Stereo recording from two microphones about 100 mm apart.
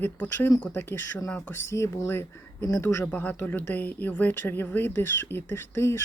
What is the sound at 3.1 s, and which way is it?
Speech, 15° left (ahead or behind).